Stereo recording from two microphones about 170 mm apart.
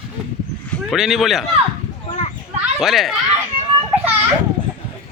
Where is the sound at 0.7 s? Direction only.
Centre (ahead or behind).